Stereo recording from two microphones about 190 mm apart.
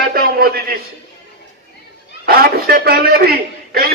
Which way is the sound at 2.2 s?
55° right (ahead or behind).